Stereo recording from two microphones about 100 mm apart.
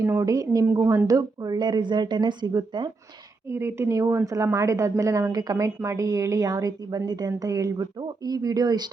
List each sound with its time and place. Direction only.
0.0 s a woman's voice: 30° right (ahead or behind)
3.4 s a woman's voice: 25° right (ahead or behind); by 8.9 s 45° right (ahead or behind)